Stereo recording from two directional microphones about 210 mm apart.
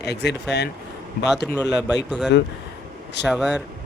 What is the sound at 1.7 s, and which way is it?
Speech, 5° right (ahead or behind).